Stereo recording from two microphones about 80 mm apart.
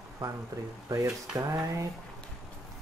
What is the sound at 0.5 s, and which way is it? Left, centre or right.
Speech, right.